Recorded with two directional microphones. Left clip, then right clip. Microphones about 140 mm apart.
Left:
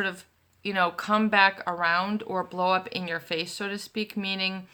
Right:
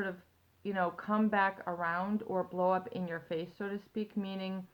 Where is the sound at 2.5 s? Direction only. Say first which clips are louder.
Left 7 dB; 20° left (ahead or behind).